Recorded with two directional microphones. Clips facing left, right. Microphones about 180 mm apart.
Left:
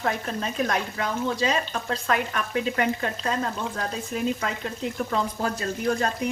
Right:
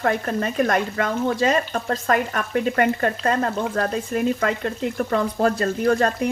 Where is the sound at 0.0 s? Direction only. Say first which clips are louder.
Right 6 dB; 60° right (ahead or behind).